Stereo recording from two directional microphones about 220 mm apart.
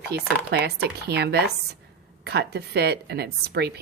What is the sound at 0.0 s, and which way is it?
Speech, 45° right (ahead or behind).